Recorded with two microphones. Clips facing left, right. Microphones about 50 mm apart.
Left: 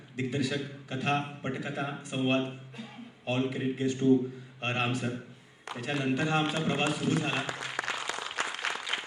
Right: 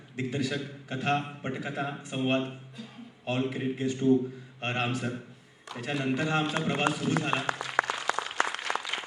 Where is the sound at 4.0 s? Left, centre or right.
Centre.